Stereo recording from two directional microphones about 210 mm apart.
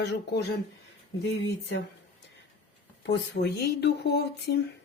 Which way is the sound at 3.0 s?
50° left (ahead or behind).